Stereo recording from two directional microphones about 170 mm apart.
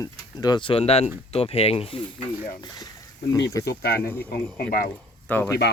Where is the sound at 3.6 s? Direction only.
70° left (ahead or behind).